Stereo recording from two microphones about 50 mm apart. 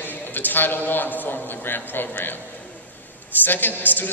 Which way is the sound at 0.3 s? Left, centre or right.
Left.